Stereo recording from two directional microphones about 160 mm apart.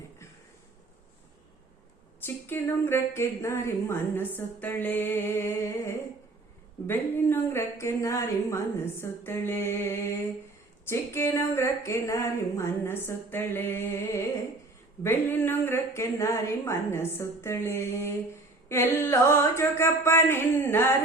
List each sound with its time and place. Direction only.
2.2 s speech: 15° left (ahead or behind)